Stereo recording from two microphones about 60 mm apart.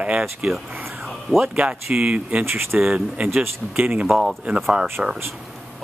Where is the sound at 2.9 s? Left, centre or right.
Right.